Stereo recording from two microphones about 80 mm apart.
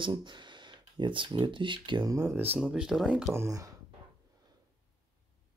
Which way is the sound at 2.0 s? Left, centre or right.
Right.